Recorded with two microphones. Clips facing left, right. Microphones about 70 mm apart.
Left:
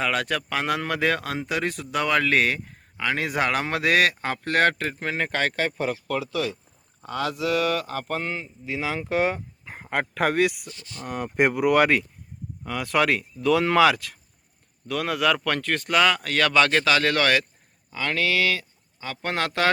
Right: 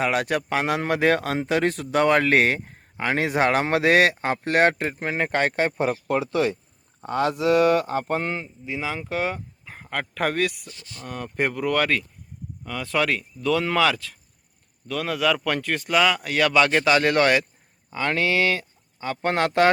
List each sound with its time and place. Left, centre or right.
0.0 s speech: right
8.4 s a man's voice: centre; by 19.7 s right